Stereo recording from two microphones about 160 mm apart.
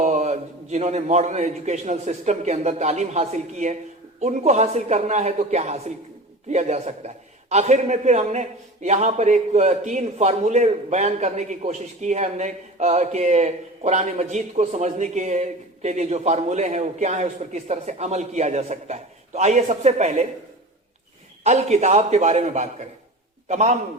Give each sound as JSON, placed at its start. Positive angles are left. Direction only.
{"t": 0.0, "sound": "a man's voice", "side_deg": -50}
{"t": 21.4, "sound": "a man's voice", "side_deg": -45}